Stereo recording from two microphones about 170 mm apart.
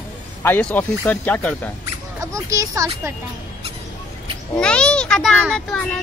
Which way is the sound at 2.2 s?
20° right (ahead or behind).